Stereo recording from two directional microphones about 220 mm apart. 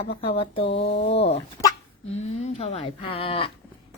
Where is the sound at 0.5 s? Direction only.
50° left (ahead or behind).